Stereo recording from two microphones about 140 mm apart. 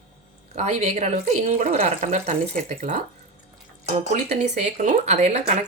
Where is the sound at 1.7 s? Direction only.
45° right (ahead or behind).